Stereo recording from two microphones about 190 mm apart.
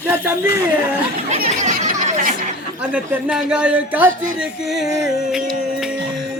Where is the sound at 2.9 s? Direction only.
5° right (ahead or behind).